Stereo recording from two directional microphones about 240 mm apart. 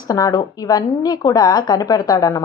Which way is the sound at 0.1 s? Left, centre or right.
Centre.